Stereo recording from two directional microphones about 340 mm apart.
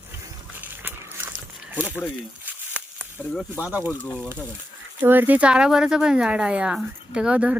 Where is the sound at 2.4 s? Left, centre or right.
Centre.